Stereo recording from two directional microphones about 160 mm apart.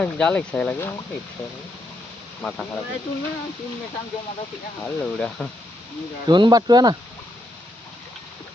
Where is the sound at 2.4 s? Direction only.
5° left (ahead or behind).